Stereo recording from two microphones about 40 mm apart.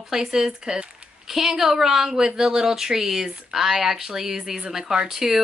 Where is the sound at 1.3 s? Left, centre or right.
Centre.